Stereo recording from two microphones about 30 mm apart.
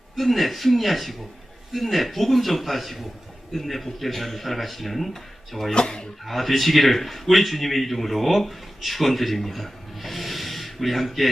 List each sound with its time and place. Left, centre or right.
0.2 s a man's voice: centre
5.7 s speech: left
6.2 s a man's voice: centre